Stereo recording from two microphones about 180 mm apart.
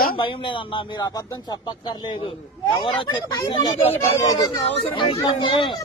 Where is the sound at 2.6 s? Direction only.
25° left (ahead or behind).